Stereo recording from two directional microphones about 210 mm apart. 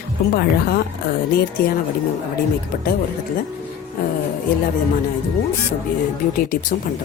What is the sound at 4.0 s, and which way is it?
Speech, 45° left (ahead or behind).